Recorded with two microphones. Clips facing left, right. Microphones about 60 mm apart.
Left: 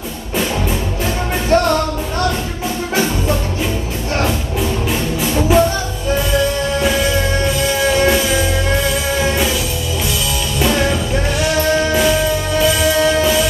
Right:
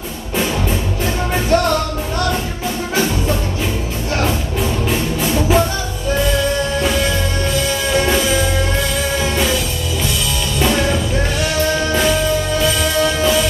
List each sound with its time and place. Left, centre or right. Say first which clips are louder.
1.5 s music: left 2 dB; left
4.8 s music: even; centre
10.6 s music: left 1 dB; centre
12.5 s music: left 6 dB; centre